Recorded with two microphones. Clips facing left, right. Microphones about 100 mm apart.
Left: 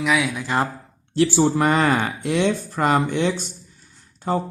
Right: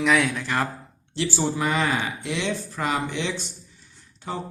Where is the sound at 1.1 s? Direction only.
50° left (ahead or behind).